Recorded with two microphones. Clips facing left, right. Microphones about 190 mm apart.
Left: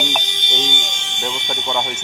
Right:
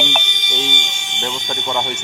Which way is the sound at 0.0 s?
Centre (ahead or behind).